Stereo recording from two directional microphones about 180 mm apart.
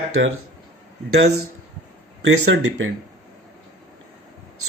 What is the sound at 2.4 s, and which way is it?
Speech, 85° right.